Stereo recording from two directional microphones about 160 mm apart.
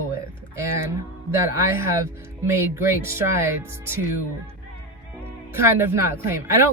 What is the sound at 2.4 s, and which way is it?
Speech, 15° right (ahead or behind).